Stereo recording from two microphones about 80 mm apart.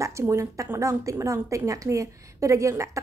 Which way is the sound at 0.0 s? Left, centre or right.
Right.